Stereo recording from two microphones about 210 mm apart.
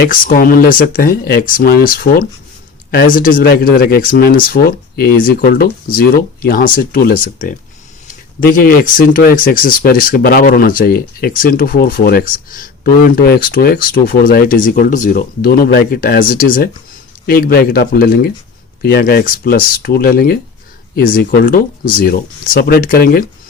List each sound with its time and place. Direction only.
0.0 s speech: 40° left (ahead or behind)